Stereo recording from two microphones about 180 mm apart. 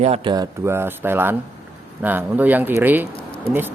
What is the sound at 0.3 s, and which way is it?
Speech, 15° right (ahead or behind).